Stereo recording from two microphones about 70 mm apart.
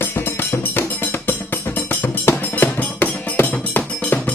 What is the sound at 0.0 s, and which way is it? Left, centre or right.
Music, left.